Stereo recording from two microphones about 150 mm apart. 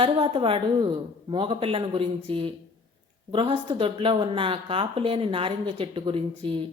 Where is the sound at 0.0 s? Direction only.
35° right (ahead or behind).